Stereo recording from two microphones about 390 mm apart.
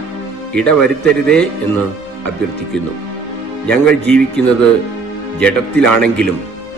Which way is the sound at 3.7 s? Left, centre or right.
Centre.